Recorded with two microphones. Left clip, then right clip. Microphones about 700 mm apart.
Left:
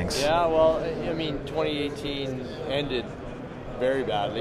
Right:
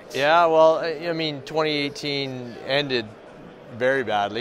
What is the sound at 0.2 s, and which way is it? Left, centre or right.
Speech, right.